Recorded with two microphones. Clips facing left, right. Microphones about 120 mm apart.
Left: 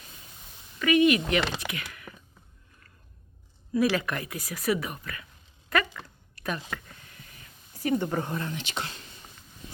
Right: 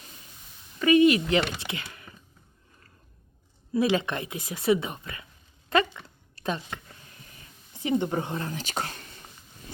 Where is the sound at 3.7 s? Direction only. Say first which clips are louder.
Right 1 dB; 25° right (ahead or behind).